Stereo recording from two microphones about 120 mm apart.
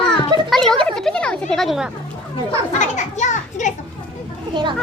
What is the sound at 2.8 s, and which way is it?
Children playing, 80° left.